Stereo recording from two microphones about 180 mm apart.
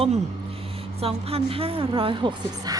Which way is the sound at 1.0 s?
30° right (ahead or behind).